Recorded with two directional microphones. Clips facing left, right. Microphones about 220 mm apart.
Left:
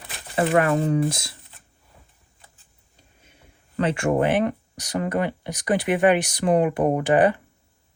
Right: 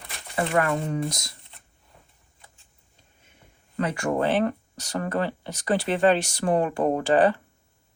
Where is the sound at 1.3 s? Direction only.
5° left (ahead or behind).